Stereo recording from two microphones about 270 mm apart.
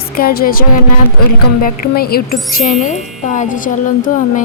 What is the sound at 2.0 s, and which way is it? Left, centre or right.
Music, left.